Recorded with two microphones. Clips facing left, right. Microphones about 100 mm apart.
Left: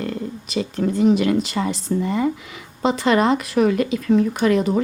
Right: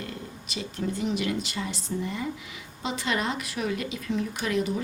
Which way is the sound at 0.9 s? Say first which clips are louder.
Left 13 dB; 45° left (ahead or behind).